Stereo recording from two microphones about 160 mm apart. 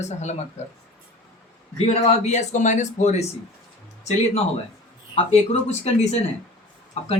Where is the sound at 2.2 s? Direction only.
45° left (ahead or behind).